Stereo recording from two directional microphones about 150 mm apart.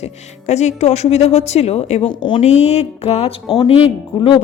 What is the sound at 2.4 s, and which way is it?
Speech, 45° left (ahead or behind).